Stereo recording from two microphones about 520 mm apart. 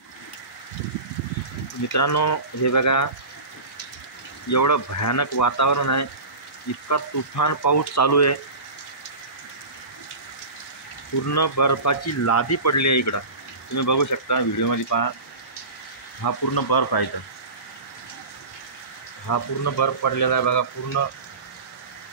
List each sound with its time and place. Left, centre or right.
2.0 s speech: left
4.5 s speech: left
11.2 s speech: left
16.2 s speech: left
19.2 s speech: left